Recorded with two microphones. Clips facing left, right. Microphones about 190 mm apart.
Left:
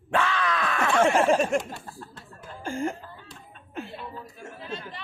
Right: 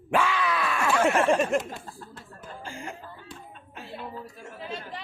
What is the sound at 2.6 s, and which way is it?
Chuckle, 45° left (ahead or behind).